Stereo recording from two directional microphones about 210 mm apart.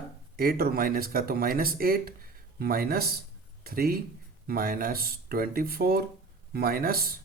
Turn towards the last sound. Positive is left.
turn(degrees=-45)  # may be behind; listen again after turning